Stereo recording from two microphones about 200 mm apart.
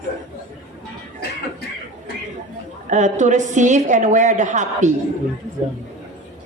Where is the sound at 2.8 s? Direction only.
35° right (ahead or behind).